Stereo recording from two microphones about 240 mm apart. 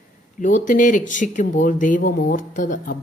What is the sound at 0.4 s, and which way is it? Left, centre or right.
Speech, left.